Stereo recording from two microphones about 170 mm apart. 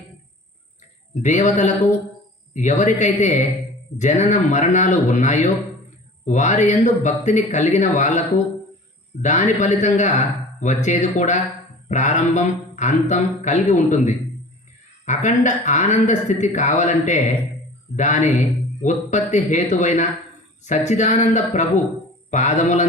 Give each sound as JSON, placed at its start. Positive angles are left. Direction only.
{"t": 1.2, "sound": "speech", "side_deg": 45}
{"t": 9.2, "sound": "speech", "side_deg": 45}